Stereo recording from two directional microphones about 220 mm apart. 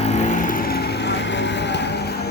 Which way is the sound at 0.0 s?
35° left (ahead or behind).